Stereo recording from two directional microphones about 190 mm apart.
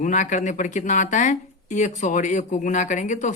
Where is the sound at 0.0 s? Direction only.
40° left (ahead or behind).